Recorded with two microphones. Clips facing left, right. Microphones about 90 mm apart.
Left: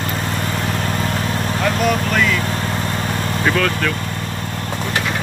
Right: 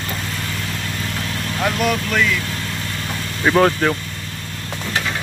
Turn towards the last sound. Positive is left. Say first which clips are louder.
# right 4 dB
turn(degrees=-30)  # may be behind; listen again after turning